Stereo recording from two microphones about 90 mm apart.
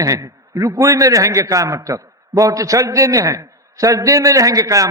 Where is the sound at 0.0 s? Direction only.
40° right (ahead or behind).